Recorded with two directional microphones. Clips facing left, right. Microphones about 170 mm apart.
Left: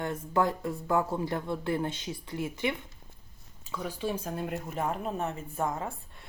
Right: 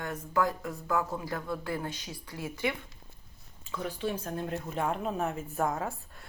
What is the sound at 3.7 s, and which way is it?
Speech, 10° left (ahead or behind).